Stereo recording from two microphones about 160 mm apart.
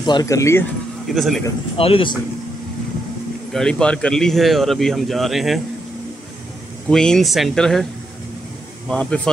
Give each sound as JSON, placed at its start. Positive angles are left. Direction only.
{"t": 0.0, "sound": "speech", "side_deg": 25}
{"t": 1.0, "sound": "speech", "side_deg": 0}
{"t": 1.8, "sound": "speech", "side_deg": 35}
{"t": 3.5, "sound": "a man's voice", "side_deg": 5}
{"t": 6.9, "sound": "a man's voice", "side_deg": 5}
{"t": 8.8, "sound": "speech", "side_deg": 5}